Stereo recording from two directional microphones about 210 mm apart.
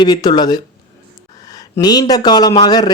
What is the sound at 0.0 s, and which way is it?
Speech, 20° left (ahead or behind).